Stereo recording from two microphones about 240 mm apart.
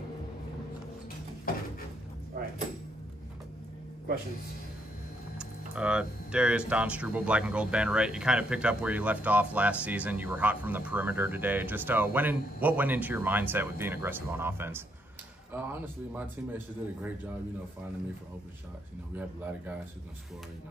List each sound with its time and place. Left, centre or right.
1.5 s a sound: left
5.4 s speech: centre
19.1 s speech: centre